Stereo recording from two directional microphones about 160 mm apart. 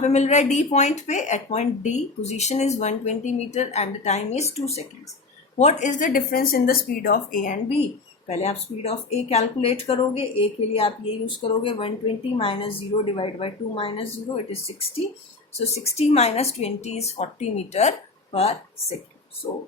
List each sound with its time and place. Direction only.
0.0 s speech: 45° left (ahead or behind)
8.3 s speech: 40° left (ahead or behind)
15.5 s speech: 40° left (ahead or behind)